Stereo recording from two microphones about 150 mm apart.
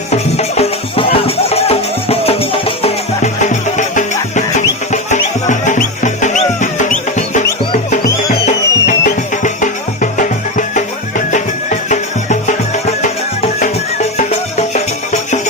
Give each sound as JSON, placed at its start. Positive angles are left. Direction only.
{"t": 0.1, "sound": "music", "side_deg": 45}
{"t": 3.4, "sound": "music", "side_deg": 55}
{"t": 8.4, "sound": "music", "side_deg": 55}
{"t": 11.3, "sound": "music", "side_deg": 55}